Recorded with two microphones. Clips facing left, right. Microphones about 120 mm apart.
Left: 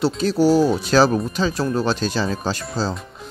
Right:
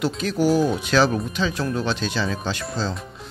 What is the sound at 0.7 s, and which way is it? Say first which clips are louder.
Speech: left 3 dB; 35° left (ahead or behind).